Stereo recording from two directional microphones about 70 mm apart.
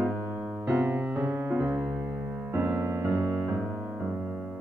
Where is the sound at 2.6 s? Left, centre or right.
Right.